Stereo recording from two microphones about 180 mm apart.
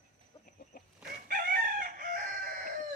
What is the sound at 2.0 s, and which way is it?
Chicken, 50° right (ahead or behind).